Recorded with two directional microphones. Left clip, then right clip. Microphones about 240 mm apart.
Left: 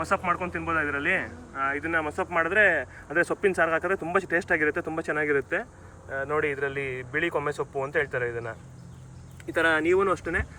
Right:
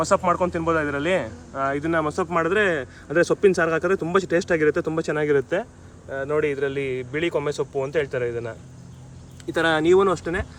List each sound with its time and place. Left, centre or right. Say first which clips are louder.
0.2 s speech: right 6 dB; centre
6.8 s a man's voice: right 5 dB; left
7.1 s speech: right 1 dB; centre